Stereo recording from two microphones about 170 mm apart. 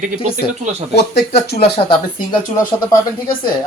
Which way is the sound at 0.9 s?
70° left (ahead or behind).